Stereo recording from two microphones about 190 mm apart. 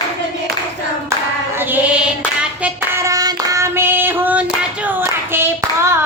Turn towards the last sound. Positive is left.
turn(degrees=-10)  # may be behind; listen again after turning